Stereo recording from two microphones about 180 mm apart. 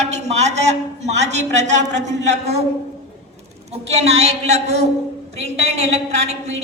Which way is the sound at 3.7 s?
35° right (ahead or behind).